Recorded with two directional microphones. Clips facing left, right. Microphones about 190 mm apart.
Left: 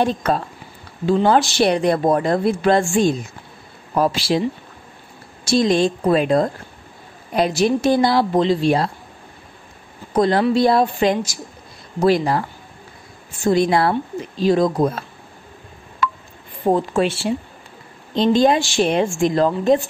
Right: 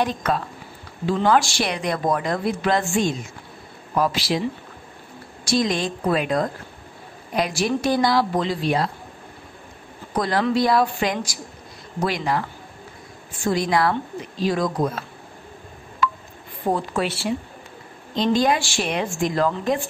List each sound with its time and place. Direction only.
0.0 s a woman's voice: 30° left (ahead or behind)
5.4 s a woman's voice: 25° left (ahead or behind)
10.1 s a woman's voice: 25° left (ahead or behind)
16.7 s a woman's voice: 25° left (ahead or behind)